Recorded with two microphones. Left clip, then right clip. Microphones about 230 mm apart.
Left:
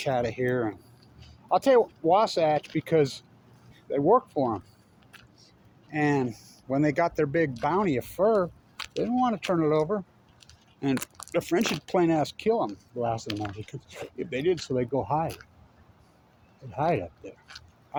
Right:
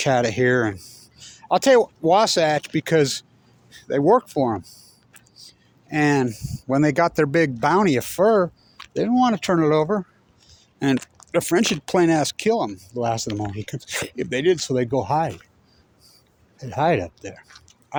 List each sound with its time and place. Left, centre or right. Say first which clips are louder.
0.0 s speech: right 8 dB; right
10.9 s a sound: right 6 dB; left
11.3 s speech: right 6 dB; right
16.6 s speech: right 7 dB; right